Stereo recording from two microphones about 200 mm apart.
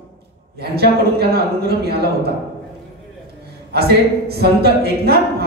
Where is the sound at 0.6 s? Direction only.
50° right (ahead or behind).